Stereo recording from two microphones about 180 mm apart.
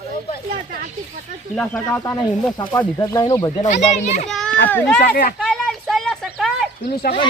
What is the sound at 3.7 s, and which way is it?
Speech, 40° left (ahead or behind).